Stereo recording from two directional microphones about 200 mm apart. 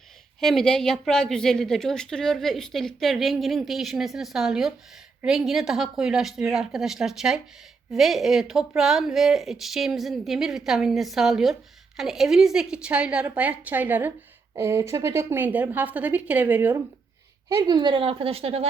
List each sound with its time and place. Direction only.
0.3 s a woman's voice: centre (ahead or behind); by 18.7 s 30° right (ahead or behind)